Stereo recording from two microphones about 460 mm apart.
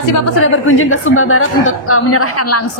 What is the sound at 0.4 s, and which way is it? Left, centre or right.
A woman's voice, left.